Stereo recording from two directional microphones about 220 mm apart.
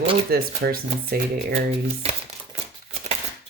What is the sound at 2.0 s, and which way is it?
Speech, 25° right (ahead or behind).